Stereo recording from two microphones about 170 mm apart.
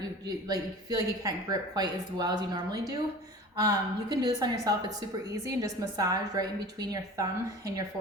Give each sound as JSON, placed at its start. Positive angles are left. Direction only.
{"t": 0.3, "sound": "speech", "side_deg": -20}